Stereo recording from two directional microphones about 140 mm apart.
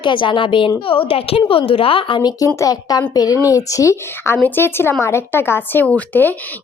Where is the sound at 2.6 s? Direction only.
25° left (ahead or behind).